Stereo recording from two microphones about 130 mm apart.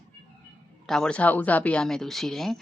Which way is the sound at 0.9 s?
5° left (ahead or behind).